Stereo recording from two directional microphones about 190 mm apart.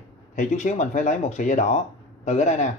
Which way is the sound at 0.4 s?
40° left (ahead or behind).